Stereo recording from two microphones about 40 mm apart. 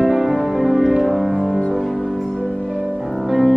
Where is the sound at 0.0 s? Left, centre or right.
Centre.